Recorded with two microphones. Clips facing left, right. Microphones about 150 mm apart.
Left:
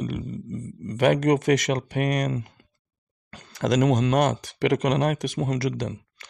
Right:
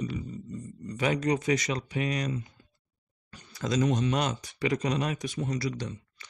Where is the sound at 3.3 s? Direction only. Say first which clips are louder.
Left 6 dB; 85° left.